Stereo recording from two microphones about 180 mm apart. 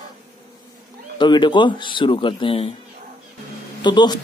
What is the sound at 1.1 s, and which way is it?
A man's voice, 25° left (ahead or behind).